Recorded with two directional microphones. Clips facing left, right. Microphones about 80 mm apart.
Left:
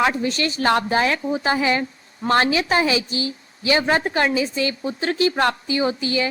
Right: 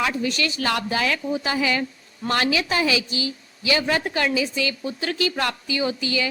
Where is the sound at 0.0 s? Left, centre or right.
Left.